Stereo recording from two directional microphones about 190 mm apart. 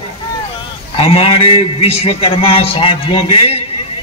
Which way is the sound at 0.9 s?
30° left (ahead or behind).